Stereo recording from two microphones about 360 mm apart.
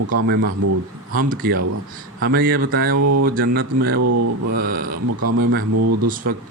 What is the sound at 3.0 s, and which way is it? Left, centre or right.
Speech, right.